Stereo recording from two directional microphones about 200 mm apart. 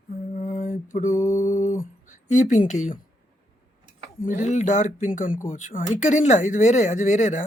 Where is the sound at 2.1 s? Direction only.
40° left (ahead or behind).